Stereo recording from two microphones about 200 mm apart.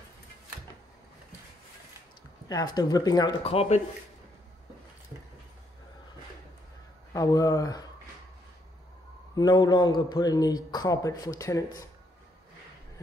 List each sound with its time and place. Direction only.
2.4 s a man's voice: 20° left (ahead or behind)
7.2 s speech: 15° left (ahead or behind)
9.3 s a man's voice: 20° left (ahead or behind)